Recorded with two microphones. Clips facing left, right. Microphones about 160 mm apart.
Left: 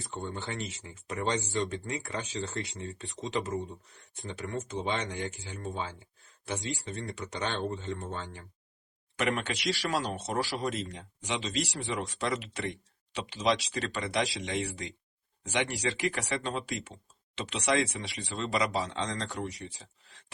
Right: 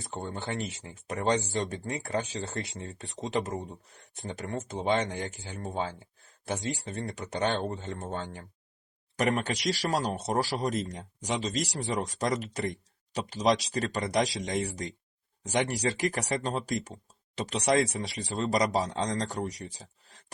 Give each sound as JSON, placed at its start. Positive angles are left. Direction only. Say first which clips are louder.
{"t": 0.3, "sound": "speech", "louder": "right 4 dB", "side_deg": -40}